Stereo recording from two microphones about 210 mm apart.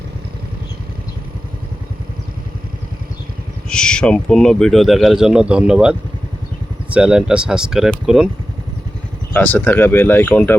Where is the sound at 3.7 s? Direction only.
5° left (ahead or behind).